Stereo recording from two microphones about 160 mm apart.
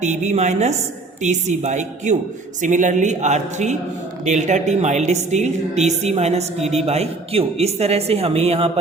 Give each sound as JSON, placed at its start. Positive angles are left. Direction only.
{"t": 0.0, "sound": "a woman's voice", "side_deg": -45}